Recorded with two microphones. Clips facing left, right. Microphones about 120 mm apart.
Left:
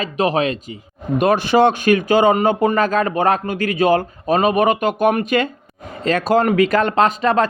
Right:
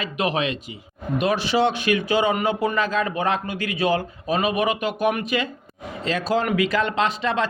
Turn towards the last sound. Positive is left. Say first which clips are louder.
# left 7 dB
turn(degrees=50)  # may be behind; listen again after turning